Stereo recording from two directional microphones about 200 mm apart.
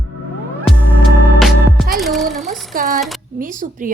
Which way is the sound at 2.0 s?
Centre (ahead or behind).